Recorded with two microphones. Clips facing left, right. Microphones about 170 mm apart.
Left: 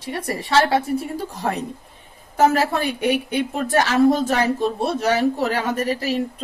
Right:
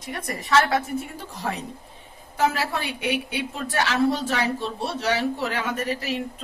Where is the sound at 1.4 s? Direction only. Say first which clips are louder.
Left 3 dB; 50° left (ahead or behind).